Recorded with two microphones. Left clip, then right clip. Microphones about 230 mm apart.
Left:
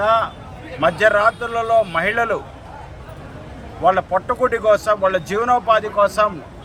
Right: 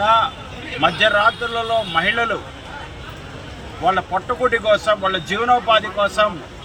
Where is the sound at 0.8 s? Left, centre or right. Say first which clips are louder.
Left 1 dB; centre.